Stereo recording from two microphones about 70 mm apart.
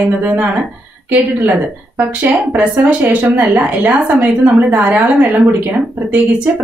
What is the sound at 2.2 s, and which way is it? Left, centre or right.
A woman's voice, right.